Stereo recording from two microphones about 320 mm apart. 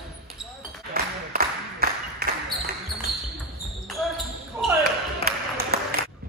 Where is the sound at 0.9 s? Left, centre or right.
Right.